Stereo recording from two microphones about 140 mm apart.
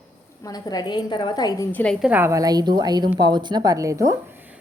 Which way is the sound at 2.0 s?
15° right (ahead or behind).